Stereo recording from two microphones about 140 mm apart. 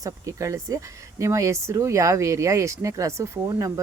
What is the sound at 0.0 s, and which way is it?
Speech, 20° right (ahead or behind).